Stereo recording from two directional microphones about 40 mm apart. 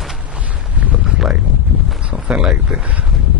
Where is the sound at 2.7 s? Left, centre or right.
Right.